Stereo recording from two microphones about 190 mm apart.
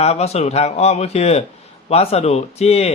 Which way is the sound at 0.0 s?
35° left (ahead or behind).